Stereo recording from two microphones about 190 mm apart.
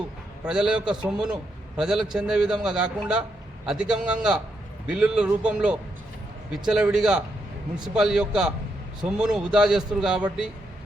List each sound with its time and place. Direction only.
0.4 s a man's voice: 5° right (ahead or behind)